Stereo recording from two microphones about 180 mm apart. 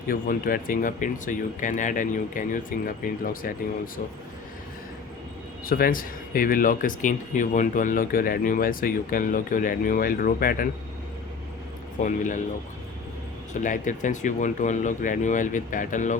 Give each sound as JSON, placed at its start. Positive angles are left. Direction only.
{"t": 0.1, "sound": "speech", "side_deg": 50}
{"t": 5.6, "sound": "speech", "side_deg": 55}
{"t": 11.9, "sound": "speech", "side_deg": 45}
{"t": 13.5, "sound": "speech", "side_deg": 45}